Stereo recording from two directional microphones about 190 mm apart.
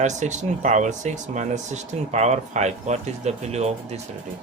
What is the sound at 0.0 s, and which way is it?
Speech, 40° right (ahead or behind).